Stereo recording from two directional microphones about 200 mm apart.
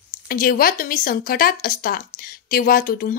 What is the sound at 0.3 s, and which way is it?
A woman's voice, 45° left (ahead or behind).